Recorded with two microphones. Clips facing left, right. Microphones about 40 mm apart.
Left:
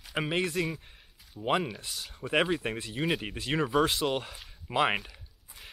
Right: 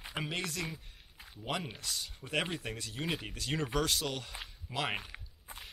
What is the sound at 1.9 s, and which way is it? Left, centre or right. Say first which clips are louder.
Speech: even; centre.